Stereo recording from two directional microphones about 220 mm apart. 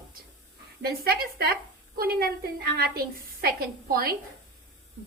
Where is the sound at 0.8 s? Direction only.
45° right (ahead or behind).